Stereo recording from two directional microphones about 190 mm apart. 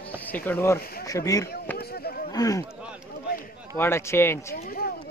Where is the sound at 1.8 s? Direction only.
55° left (ahead or behind).